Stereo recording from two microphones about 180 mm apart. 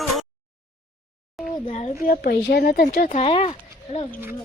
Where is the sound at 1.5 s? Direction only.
35° left (ahead or behind).